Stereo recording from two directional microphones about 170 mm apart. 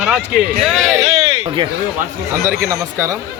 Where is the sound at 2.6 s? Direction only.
15° right (ahead or behind).